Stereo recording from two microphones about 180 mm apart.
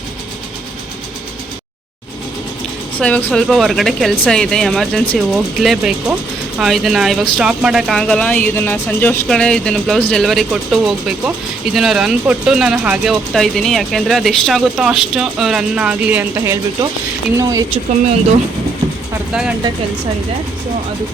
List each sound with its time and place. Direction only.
3.0 s speech: 10° left (ahead or behind); by 17.7 s 20° right (ahead or behind)
19.3 s speech: 5° right (ahead or behind)